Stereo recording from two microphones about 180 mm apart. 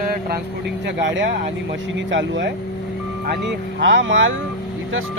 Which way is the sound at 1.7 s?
90° right.